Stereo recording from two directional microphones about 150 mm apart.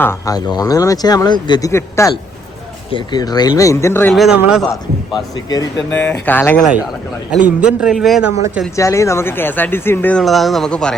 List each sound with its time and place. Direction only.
0.0 s speech: 20° left (ahead or behind)
4.1 s a man's voice: centre (ahead or behind)
4.7 s speech: 25° left (ahead or behind)
6.0 s speech: 15° left (ahead or behind)
7.4 s a man's voice: 5° right (ahead or behind)
8.7 s speech: 20° left (ahead or behind)